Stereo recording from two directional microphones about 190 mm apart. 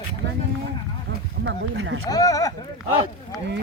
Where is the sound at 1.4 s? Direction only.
80° right.